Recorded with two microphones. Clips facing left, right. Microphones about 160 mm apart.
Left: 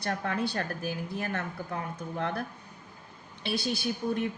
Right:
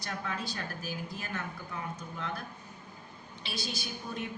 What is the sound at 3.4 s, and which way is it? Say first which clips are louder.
Speech: left 9 dB; 60° left (ahead or behind).